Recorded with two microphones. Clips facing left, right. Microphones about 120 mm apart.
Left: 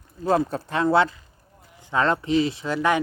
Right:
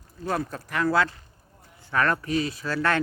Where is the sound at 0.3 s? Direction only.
25° left (ahead or behind).